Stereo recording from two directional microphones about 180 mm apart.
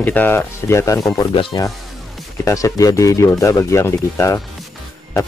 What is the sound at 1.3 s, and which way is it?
Speech, 30° left (ahead or behind).